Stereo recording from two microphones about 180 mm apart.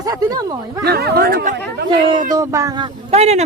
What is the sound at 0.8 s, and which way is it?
Speech, 60° right (ahead or behind).